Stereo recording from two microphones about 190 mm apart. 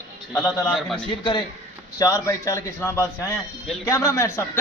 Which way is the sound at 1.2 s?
25° left (ahead or behind).